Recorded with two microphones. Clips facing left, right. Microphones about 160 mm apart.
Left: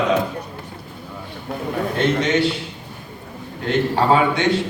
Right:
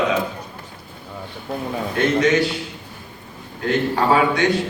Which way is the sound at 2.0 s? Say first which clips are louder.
Right 2 dB; 30° left (ahead or behind).